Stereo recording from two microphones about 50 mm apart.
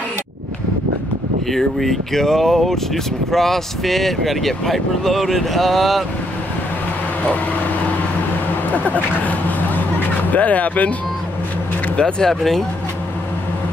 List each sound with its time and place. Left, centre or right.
1.5 s speech: centre
8.7 s speech: left
9.8 s music: left
12.0 s speech: centre